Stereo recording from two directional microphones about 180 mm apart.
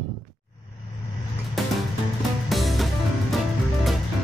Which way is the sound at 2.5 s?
Centre (ahead or behind).